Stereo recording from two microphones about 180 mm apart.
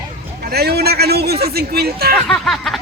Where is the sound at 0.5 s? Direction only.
60° right (ahead or behind).